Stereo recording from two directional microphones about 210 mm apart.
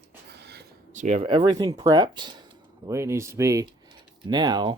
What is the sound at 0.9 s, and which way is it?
Speech, 35° right (ahead or behind).